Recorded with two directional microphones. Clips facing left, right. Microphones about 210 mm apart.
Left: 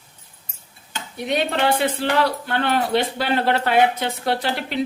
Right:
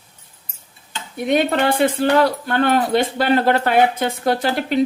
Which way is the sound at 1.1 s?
50° right (ahead or behind).